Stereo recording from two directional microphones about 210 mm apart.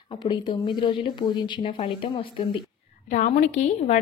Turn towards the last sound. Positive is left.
turn(degrees=35)  # may be behind; listen again after turning